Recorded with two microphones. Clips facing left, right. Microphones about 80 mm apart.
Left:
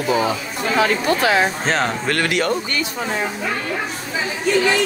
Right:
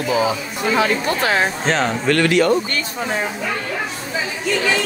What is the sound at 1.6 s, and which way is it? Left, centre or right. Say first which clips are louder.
Speech: right 1 dB; centre.